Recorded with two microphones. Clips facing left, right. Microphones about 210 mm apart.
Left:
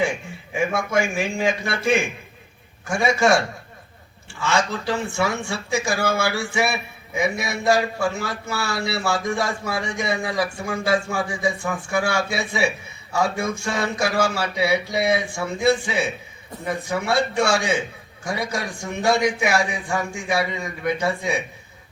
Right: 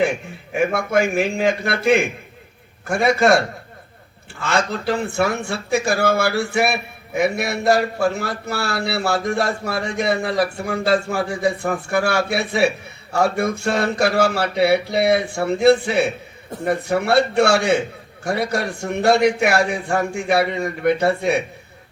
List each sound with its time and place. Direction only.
0.0 s a man's voice: 60° right (ahead or behind)